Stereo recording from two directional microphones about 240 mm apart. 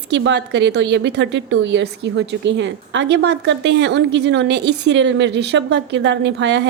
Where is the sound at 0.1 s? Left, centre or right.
Right.